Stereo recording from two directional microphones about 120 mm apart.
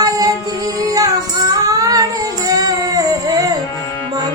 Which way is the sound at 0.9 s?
30° right (ahead or behind).